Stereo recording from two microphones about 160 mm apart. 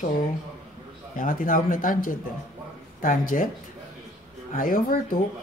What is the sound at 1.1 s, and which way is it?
Speech, 55° left (ahead or behind).